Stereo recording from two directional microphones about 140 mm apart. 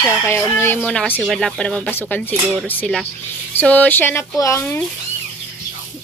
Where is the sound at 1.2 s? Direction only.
Centre (ahead or behind).